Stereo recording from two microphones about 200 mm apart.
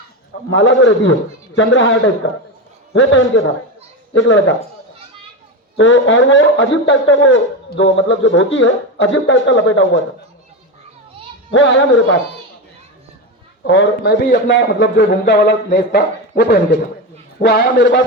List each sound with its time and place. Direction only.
0.5 s a man's voice: 70° left (ahead or behind)
5.7 s a man's voice: 70° left (ahead or behind)
11.5 s a man's voice: 70° left (ahead or behind)
13.7 s a man's voice: 65° left (ahead or behind)